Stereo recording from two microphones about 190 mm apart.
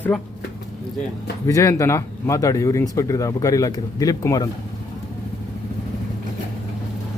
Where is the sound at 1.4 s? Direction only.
15° left (ahead or behind).